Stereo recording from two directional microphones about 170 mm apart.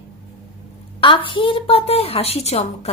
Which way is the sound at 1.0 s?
30° left (ahead or behind).